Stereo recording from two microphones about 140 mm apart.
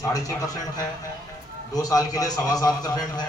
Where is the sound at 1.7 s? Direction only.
25° left (ahead or behind).